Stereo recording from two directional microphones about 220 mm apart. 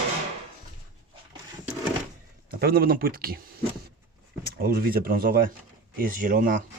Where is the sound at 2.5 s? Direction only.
45° right (ahead or behind).